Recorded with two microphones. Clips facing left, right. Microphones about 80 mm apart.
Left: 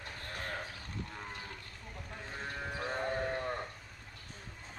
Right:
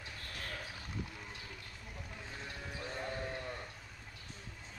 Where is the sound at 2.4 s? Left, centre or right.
Left.